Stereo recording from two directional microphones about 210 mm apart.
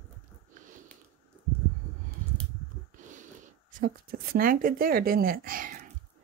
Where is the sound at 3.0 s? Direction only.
35° right (ahead or behind).